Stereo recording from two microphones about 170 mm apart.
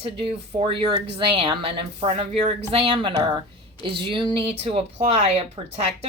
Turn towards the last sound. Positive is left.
turn(degrees=-40)  # may be behind; listen again after turning